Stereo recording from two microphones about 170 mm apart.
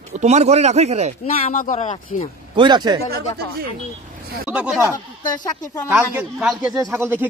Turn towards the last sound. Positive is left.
turn(degrees=-15)  # may be behind; listen again after turning